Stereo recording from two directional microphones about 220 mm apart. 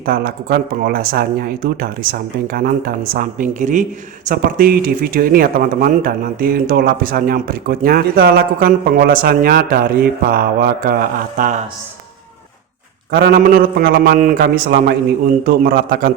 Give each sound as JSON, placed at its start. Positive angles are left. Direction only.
{"t": 0.0, "sound": "speech", "side_deg": -40}
{"t": 13.1, "sound": "a man's voice", "side_deg": -45}